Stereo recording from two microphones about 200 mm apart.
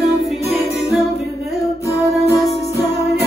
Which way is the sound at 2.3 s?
15° left (ahead or behind).